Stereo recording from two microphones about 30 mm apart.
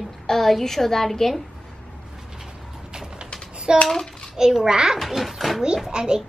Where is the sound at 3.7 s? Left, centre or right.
Right.